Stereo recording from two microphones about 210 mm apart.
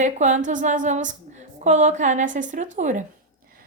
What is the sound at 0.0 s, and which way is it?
A woman's voice, 35° right (ahead or behind).